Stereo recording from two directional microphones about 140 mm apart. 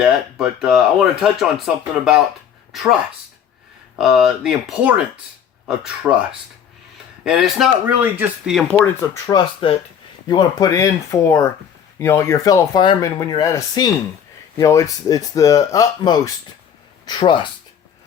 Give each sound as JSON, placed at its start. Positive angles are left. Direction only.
{"t": 0.0, "sound": "speech", "side_deg": 0}
{"t": 3.9, "sound": "speech", "side_deg": -5}
{"t": 7.3, "sound": "speech", "side_deg": 0}
{"t": 8.1, "sound": "speech", "side_deg": -15}
{"t": 8.8, "sound": "speech", "side_deg": 20}
{"t": 9.6, "sound": "speech", "side_deg": 40}
{"t": 10.2, "sound": "speech", "side_deg": 30}